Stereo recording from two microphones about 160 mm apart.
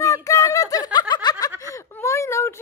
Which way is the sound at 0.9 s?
25° left (ahead or behind).